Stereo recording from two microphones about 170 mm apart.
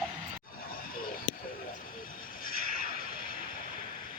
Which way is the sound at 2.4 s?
60° left (ahead or behind).